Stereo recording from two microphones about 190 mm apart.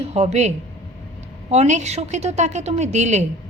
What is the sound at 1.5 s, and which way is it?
A woman's voice, 35° right (ahead or behind).